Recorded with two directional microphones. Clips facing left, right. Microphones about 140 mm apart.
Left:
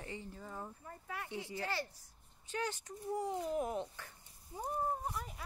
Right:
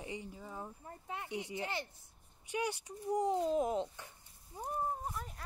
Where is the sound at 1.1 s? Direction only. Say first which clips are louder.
Right 2 dB; 20° right (ahead or behind).